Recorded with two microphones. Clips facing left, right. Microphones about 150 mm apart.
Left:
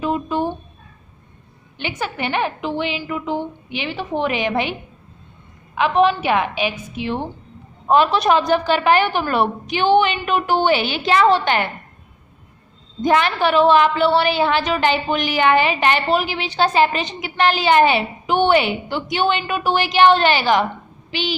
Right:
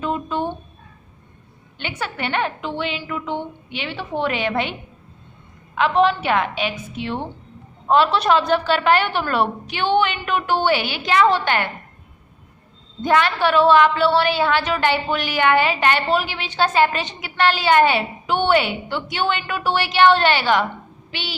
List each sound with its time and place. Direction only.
0.0 s a sound: 10° left (ahead or behind)
1.8 s a woman's voice: 10° left (ahead or behind)
5.7 s a woman's voice: 10° left (ahead or behind)
13.0 s a woman's voice: 15° left (ahead or behind)